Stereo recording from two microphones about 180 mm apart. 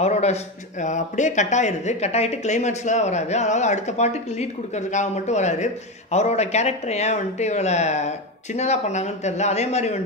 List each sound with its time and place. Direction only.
0.0 s speech: 35° left (ahead or behind)